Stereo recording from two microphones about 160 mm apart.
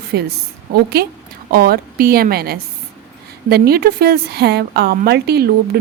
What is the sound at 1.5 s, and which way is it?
A woman's voice, 70° right (ahead or behind).